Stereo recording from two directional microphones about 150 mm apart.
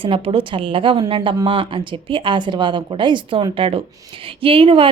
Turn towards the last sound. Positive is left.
turn(degrees=-35)  # may be behind; listen again after turning